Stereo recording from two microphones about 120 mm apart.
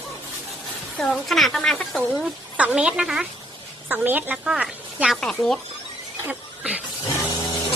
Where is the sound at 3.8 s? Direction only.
15° right (ahead or behind).